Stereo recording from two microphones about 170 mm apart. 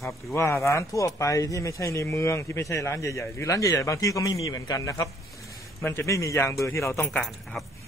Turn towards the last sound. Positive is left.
turn(degrees=0)  # may be behind; listen again after turning